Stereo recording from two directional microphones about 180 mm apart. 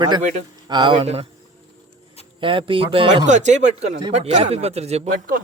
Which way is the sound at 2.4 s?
30° right (ahead or behind).